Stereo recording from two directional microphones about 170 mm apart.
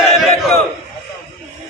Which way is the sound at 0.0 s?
Centre (ahead or behind).